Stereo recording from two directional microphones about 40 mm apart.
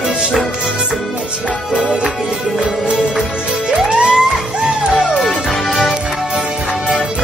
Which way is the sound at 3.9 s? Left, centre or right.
Right.